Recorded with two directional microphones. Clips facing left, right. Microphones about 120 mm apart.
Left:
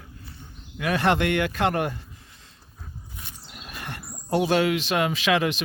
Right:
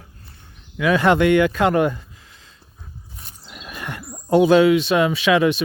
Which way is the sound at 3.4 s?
90° right.